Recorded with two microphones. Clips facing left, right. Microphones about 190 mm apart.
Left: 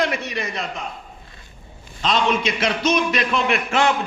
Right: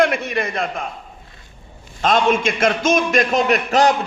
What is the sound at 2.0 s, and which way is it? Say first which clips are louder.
A man's voice: right 4 dB; 50° right (ahead or behind).